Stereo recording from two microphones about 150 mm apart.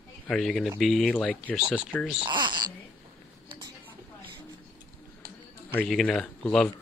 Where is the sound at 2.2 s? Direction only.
30° right (ahead or behind).